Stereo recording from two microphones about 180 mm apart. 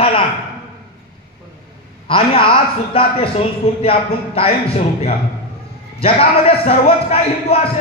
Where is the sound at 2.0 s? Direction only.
30° left (ahead or behind).